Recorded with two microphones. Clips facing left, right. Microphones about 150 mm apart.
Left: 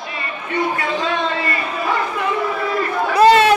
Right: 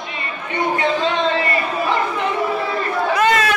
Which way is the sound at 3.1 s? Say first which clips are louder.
Left 7 dB; 30° left (ahead or behind).